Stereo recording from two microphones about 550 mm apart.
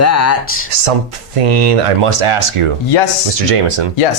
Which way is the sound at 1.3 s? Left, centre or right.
Right.